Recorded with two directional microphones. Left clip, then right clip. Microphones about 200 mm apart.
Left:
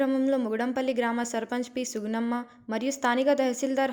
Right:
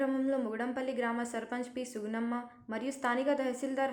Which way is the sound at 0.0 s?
25° left (ahead or behind).